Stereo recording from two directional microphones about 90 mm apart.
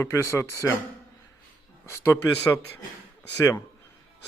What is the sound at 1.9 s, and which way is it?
Speech, 30° left (ahead or behind).